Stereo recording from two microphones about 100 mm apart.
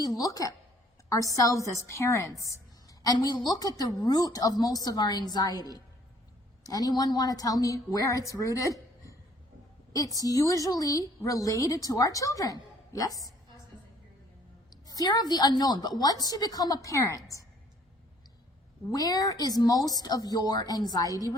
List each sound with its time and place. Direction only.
0.0 s a woman's voice: 35° left (ahead or behind)
3.0 s a woman's voice: 45° left (ahead or behind)
14.8 s a woman's voice: 40° left (ahead or behind)
18.9 s a woman's voice: 40° left (ahead or behind)